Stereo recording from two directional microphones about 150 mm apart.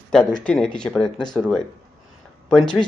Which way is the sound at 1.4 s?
5° left (ahead or behind).